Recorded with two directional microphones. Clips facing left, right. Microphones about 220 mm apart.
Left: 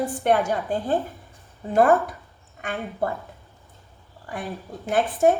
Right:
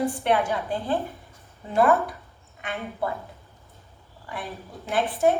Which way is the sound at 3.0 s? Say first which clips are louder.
Left 2 dB; 45° left (ahead or behind).